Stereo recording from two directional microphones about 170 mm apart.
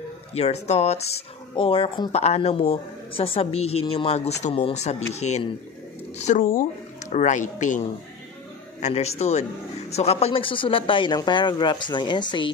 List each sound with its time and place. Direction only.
0.3 s a woman's voice: 40° left (ahead or behind)
8.8 s a man's voice: 40° left (ahead or behind)